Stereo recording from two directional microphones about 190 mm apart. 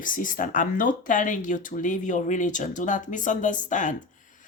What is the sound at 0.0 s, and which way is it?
Speech, 45° left (ahead or behind).